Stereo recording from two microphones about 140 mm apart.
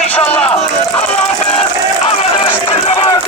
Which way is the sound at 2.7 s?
45° left (ahead or behind).